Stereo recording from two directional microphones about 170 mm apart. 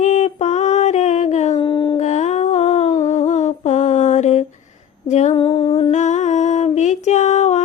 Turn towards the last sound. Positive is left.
turn(degrees=45)  # may be behind; listen again after turning